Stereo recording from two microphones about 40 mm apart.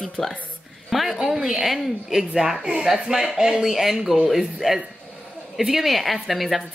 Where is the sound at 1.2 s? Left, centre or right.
Centre.